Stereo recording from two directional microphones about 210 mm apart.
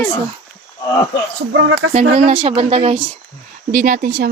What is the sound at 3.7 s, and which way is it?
Speech, 40° right (ahead or behind).